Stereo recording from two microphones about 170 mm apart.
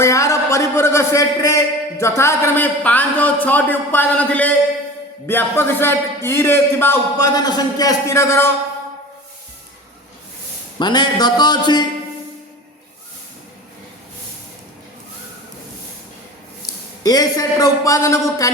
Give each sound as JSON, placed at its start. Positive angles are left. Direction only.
{"t": 0.0, "sound": "a man's voice", "side_deg": 20}
{"t": 10.8, "sound": "a man's voice", "side_deg": 25}
{"t": 17.0, "sound": "a man's voice", "side_deg": 20}